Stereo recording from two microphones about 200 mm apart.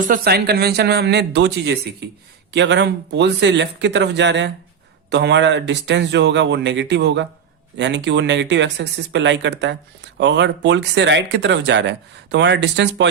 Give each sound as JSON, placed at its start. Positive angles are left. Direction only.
{"t": 0.0, "sound": "speech", "side_deg": -45}